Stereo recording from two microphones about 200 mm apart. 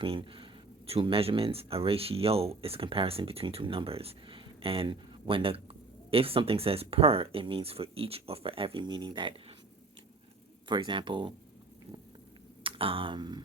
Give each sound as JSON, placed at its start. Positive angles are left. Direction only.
{"t": 0.0, "sound": "speech", "side_deg": -25}
{"t": 10.7, "sound": "speech", "side_deg": -25}
{"t": 12.6, "sound": "a sound", "side_deg": -25}